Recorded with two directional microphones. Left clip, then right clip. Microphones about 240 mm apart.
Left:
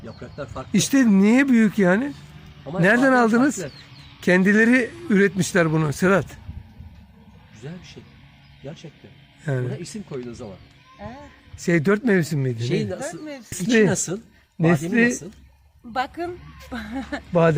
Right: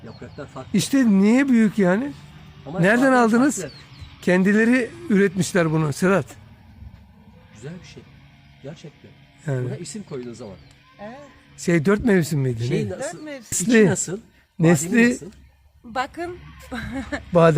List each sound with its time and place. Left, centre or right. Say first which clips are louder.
0.0 s speech: left 3 dB; left
0.7 s speech: left 1 dB; centre
7.6 s speech: even; centre
11.0 s speech: right 1 dB; right
11.5 s speech: even; centre
12.6 s speech: left 2 dB; left
13.0 s speech: right 1 dB; right
14.6 s speech: right 1 dB; right